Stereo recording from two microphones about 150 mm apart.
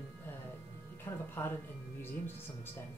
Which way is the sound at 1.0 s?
15° left (ahead or behind).